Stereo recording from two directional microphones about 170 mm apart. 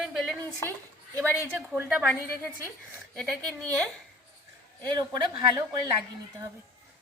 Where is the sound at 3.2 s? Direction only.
Centre (ahead or behind).